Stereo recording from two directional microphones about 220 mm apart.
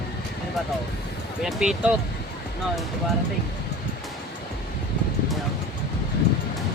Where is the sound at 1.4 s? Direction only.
Centre (ahead or behind).